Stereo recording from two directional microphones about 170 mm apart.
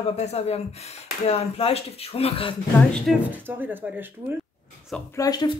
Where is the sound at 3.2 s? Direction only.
10° right (ahead or behind).